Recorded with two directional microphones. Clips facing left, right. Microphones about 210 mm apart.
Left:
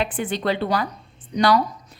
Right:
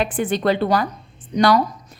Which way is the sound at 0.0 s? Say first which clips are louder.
Right 4 dB; 45° right (ahead or behind).